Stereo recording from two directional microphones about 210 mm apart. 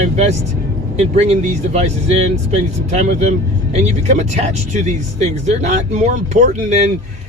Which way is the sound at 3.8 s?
30° right (ahead or behind).